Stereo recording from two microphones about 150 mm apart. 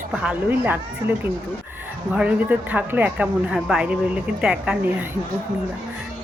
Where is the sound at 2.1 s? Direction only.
10° right (ahead or behind).